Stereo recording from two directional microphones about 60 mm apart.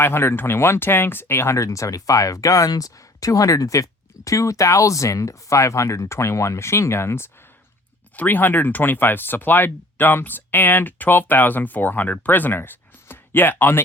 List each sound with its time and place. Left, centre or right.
0.0 s speech: left
1.5 s speech: left
8.1 s speech: left